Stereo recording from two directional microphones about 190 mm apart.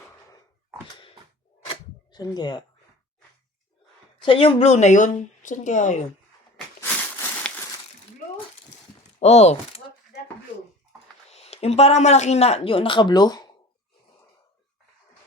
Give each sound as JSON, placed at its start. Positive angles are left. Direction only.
{"t": 2.1, "sound": "speech", "side_deg": 20}
{"t": 4.2, "sound": "speech", "side_deg": 30}
{"t": 9.1, "sound": "speech", "side_deg": 35}
{"t": 11.3, "sound": "speech", "side_deg": 35}